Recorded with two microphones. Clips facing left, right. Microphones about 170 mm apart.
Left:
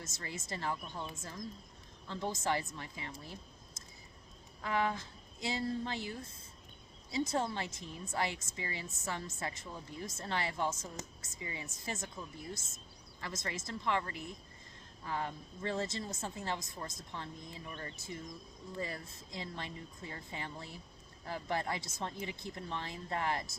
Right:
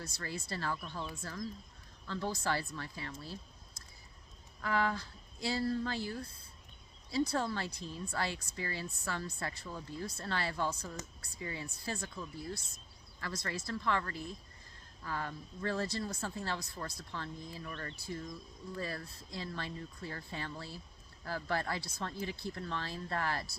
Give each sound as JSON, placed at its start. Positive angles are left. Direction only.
{"t": 0.0, "sound": "a woman's voice", "side_deg": 20}
{"t": 4.6, "sound": "a woman's voice", "side_deg": 20}